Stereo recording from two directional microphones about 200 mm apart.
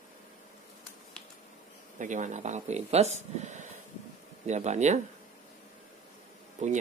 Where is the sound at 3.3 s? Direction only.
35° right (ahead or behind).